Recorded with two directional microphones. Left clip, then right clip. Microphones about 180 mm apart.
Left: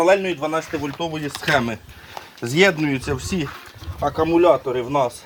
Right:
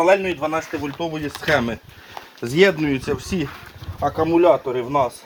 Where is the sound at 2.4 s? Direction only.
40° left (ahead or behind).